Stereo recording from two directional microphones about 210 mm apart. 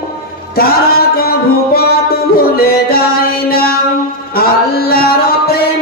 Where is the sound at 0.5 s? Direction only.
45° left (ahead or behind).